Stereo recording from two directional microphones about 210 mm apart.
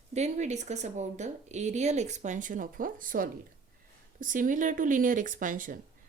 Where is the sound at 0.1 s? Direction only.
35° right (ahead or behind).